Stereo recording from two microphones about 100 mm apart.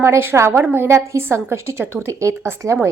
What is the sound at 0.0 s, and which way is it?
A woman's voice, 25° right (ahead or behind).